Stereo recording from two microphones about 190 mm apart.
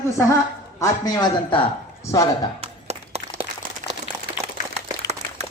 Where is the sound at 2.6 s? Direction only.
35° right (ahead or behind).